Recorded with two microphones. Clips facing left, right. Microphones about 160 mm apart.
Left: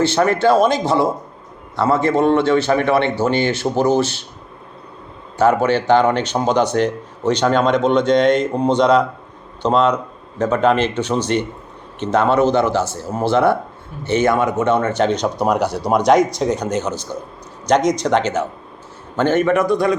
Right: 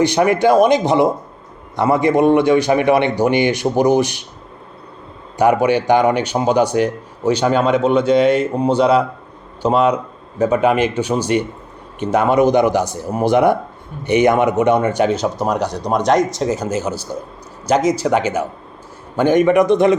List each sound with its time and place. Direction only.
0.0 s a man's voice: 15° right (ahead or behind)
5.4 s a man's voice: 15° right (ahead or behind)